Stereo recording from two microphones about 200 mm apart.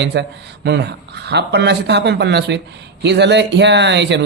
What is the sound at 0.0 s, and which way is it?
Speech, 60° right (ahead or behind).